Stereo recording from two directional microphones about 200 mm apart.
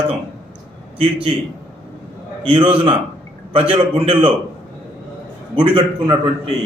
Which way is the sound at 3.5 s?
25° right (ahead or behind).